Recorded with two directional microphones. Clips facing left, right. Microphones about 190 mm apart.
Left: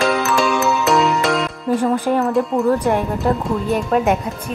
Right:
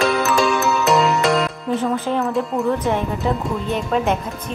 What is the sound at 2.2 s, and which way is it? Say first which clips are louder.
Speech: left 4 dB; centre (ahead or behind).